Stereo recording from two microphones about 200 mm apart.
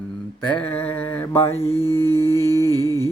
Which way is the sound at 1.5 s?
30° left (ahead or behind).